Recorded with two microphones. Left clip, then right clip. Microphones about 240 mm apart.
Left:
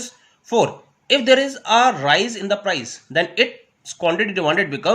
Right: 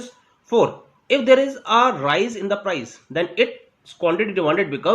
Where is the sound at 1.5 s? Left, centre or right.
Left.